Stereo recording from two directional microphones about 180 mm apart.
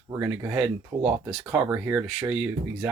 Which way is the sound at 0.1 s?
5° right (ahead or behind).